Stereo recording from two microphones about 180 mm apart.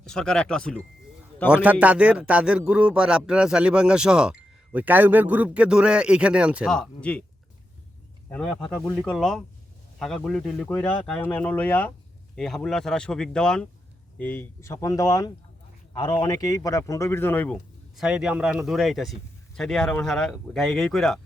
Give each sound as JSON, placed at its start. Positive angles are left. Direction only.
{"t": 0.0, "sound": "a man's voice", "side_deg": 5}
{"t": 1.5, "sound": "a man's voice", "side_deg": -5}
{"t": 8.3, "sound": "a man's voice", "side_deg": 5}
{"t": 17.9, "sound": "a man's voice", "side_deg": -5}